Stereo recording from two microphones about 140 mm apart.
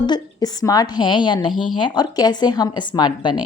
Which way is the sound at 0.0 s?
30° left (ahead or behind).